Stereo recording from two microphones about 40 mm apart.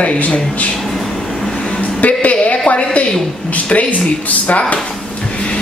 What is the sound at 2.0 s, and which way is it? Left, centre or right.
A woman's voice, left.